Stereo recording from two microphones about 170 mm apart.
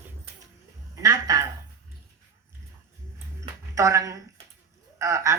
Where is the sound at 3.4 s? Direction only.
15° right (ahead or behind).